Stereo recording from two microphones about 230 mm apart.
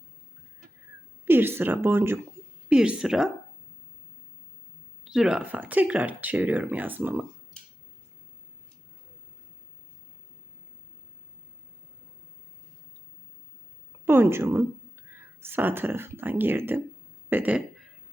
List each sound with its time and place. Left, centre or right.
1.2 s a woman's voice: centre
5.0 s speech: centre
14.0 s speech: centre